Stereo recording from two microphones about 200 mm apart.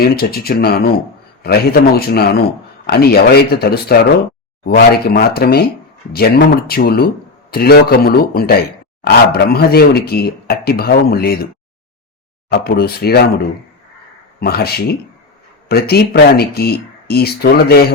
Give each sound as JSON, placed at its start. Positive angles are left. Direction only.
{"t": 0.0, "sound": "speech", "side_deg": 50}
{"t": 12.5, "sound": "speech", "side_deg": 50}